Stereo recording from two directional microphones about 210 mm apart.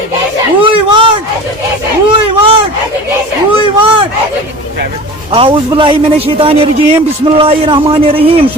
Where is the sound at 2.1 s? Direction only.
25° right (ahead or behind).